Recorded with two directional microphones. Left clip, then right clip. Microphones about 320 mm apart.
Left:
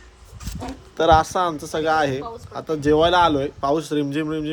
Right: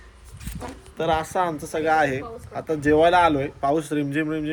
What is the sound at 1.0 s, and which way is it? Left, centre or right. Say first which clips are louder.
Speech: left 8 dB; centre.